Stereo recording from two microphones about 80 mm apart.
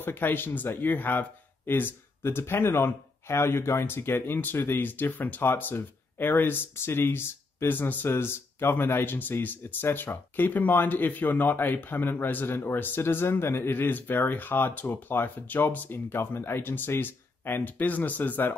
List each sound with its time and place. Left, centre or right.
0.0 s speech: left